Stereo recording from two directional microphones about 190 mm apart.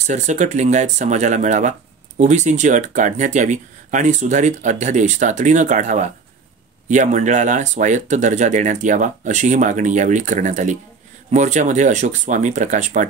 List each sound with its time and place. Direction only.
0.0 s speech: 40° right (ahead or behind)